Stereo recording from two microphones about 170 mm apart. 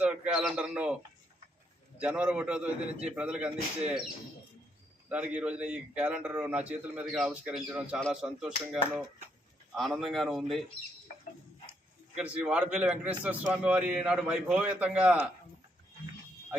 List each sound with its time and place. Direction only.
0.0 s bird: 5° right (ahead or behind)
2.0 s a man's voice: 10° right (ahead or behind)
5.0 s a man's voice: 10° right (ahead or behind)
12.1 s a man's voice: 5° right (ahead or behind)